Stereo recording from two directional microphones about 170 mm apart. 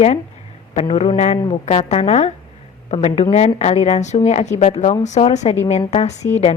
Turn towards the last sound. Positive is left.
turn(degrees=40)  # may be behind; listen again after turning